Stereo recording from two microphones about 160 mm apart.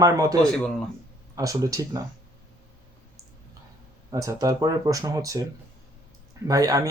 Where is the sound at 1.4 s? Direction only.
20° right (ahead or behind).